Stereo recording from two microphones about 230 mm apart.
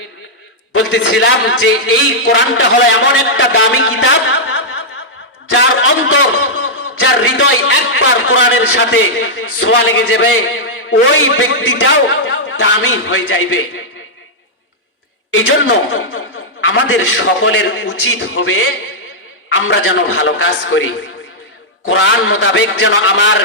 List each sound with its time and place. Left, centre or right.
0.7 s a man's voice: left
15.9 s a man's voice: left